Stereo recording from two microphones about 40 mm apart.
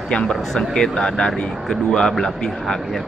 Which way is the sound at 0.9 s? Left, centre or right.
Left.